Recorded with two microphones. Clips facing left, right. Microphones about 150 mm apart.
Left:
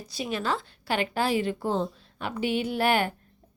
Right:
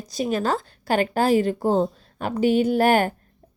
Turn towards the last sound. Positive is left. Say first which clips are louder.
# right 6 dB
turn(degrees=-45)  # may be behind; listen again after turning